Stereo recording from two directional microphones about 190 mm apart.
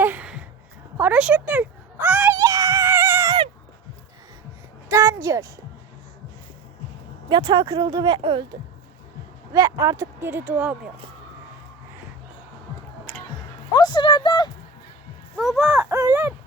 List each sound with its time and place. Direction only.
0.0 s a sound: 10° right (ahead or behind)
4.9 s a sound: 15° right (ahead or behind)
7.3 s speech: 25° right (ahead or behind)
9.5 s speech: 20° right (ahead or behind)
13.7 s speech: 25° left (ahead or behind)
15.4 s speech: centre (ahead or behind)
15.8 s speech: 15° right (ahead or behind)